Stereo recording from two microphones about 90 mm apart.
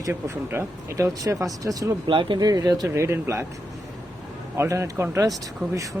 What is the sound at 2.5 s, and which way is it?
Speech, 45° right (ahead or behind).